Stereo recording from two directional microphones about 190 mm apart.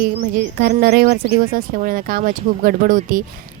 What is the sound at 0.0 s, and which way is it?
Speech, 45° right (ahead or behind).